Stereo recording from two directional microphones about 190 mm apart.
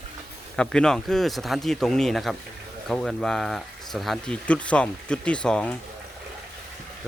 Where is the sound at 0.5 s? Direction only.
5° left (ahead or behind).